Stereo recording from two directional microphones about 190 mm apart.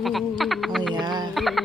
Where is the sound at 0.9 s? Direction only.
20° right (ahead or behind).